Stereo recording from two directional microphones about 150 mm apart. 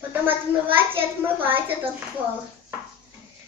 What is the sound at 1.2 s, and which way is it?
Speech, 15° right (ahead or behind).